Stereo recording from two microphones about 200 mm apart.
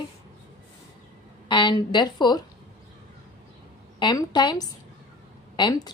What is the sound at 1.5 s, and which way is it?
Speech, 25° left (ahead or behind).